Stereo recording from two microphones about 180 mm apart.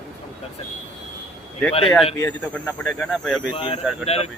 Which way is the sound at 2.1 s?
10° left (ahead or behind).